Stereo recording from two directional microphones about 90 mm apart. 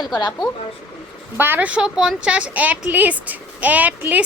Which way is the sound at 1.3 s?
25° right (ahead or behind).